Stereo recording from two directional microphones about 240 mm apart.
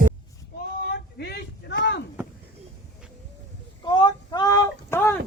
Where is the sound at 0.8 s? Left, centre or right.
Left.